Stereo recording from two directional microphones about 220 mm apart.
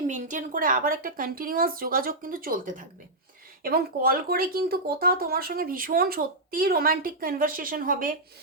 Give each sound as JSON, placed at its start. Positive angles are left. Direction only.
{"t": 0.1, "sound": "speech", "side_deg": -35}